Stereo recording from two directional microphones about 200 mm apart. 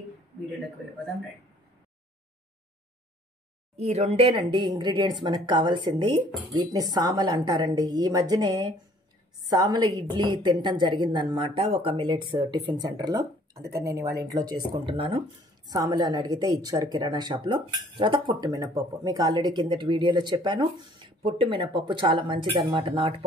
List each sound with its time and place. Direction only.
3.7 s speech: 30° right (ahead or behind)